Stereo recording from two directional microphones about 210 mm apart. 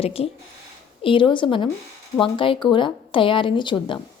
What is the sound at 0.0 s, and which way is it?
Speech, 30° left (ahead or behind).